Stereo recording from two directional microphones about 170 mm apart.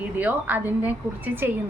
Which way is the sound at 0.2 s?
10° right (ahead or behind).